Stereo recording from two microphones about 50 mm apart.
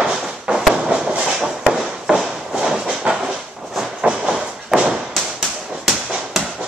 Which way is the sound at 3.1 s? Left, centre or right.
Right.